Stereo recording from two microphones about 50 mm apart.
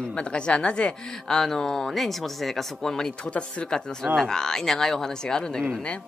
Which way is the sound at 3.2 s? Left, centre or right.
Left.